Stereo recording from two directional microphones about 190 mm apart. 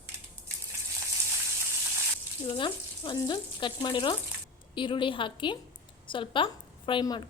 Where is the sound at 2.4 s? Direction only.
25° left (ahead or behind).